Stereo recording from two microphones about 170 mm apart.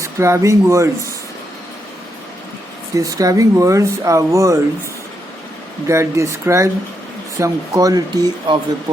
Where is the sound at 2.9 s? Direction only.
20° right (ahead or behind).